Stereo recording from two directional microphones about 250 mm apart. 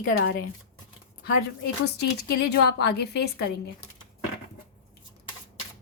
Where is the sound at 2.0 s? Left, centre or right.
Left.